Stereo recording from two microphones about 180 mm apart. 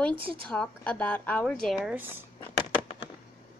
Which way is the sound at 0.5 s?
5° left (ahead or behind).